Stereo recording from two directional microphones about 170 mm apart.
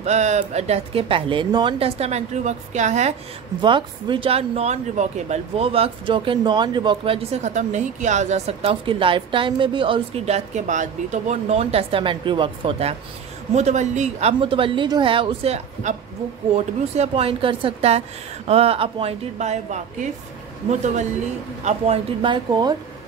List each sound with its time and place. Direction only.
0.0 s speech: 40° right (ahead or behind)
3.6 s speech: 30° right (ahead or behind)